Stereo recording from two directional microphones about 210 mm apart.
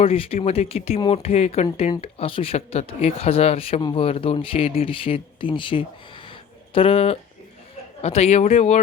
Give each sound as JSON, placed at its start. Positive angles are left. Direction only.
{"t": 0.0, "sound": "speech", "side_deg": 25}